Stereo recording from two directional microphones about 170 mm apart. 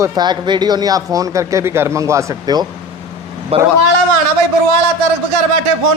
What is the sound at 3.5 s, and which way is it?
Speech, 35° right (ahead or behind).